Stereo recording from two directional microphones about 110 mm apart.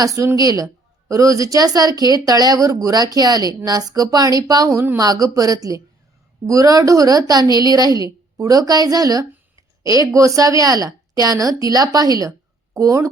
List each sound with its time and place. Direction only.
0.0 s a woman's voice: 30° right (ahead or behind)